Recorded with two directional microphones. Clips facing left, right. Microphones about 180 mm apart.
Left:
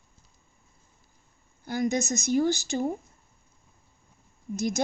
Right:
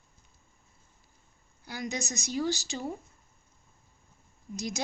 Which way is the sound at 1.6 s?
50° left (ahead or behind).